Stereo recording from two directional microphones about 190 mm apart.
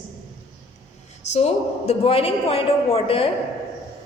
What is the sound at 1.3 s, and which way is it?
A woman's voice, 35° left (ahead or behind).